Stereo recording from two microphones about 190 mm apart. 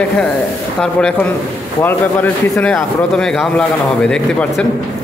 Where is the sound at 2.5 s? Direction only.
Centre (ahead or behind).